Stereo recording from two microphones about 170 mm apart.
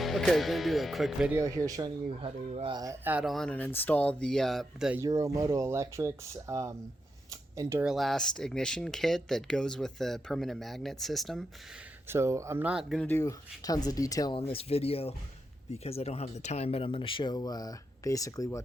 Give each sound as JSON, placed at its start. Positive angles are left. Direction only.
{"t": 0.0, "sound": "speech", "side_deg": 0}
{"t": 1.4, "sound": "speech", "side_deg": -20}
{"t": 2.2, "sound": "speech", "side_deg": -35}
{"t": 2.7, "sound": "speech", "side_deg": -20}
{"t": 4.9, "sound": "speech", "side_deg": -20}
{"t": 7.9, "sound": "speech", "side_deg": 0}
{"t": 12.0, "sound": "speech", "side_deg": -15}
{"t": 13.0, "sound": "speech", "side_deg": 15}